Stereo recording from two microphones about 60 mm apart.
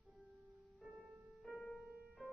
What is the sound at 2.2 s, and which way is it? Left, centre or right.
Keyboard, right.